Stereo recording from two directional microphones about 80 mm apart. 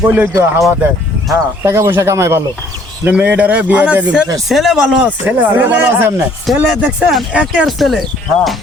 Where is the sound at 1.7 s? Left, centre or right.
Right.